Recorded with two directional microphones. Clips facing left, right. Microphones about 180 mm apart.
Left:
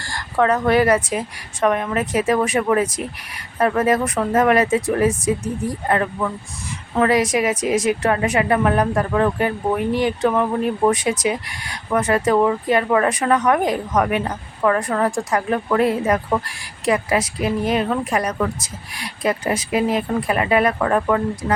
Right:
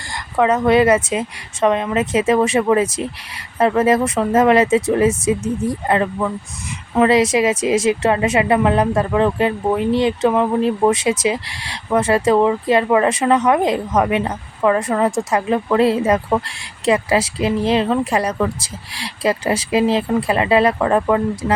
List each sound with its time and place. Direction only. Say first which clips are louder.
0.0 s a woman's voice: right 1 dB; 20° right (ahead or behind)